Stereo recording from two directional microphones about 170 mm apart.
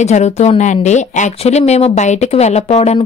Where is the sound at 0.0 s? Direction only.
40° left (ahead or behind).